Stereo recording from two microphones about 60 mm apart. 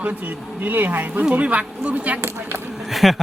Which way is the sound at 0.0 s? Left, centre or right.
Right.